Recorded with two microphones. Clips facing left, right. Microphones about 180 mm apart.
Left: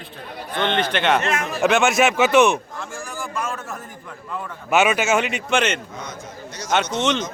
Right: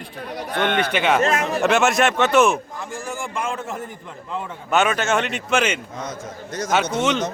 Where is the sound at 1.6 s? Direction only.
Centre (ahead or behind).